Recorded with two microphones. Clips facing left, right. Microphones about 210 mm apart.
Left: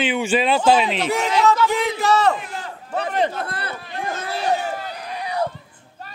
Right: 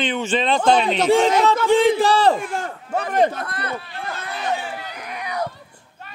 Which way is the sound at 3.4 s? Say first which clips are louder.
Even; 30° left (ahead or behind).